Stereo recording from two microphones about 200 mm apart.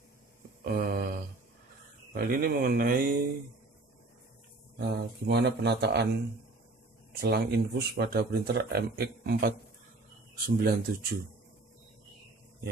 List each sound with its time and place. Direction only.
0.7 s speech: 45° right (ahead or behind)
2.1 s speech: 45° right (ahead or behind)
4.7 s speech: 55° right (ahead or behind)
7.2 s speech: 55° right (ahead or behind)